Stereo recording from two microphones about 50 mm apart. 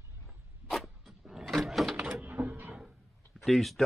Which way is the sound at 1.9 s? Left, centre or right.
Centre.